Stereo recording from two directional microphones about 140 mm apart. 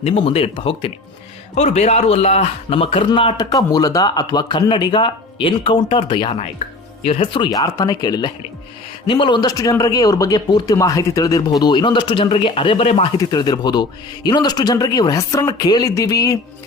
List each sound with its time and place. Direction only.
0.0 s speech: 40° left (ahead or behind)
1.5 s a man's voice: 55° left (ahead or behind)
7.5 s speech: 25° left (ahead or behind); by 13.1 s 45° left (ahead or behind)
13.1 s speech: 30° left (ahead or behind)